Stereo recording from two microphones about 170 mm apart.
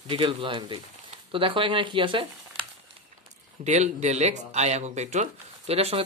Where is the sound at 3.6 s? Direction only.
40° right (ahead or behind).